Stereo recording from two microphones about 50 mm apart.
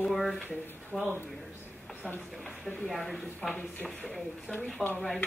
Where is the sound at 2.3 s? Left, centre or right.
Centre.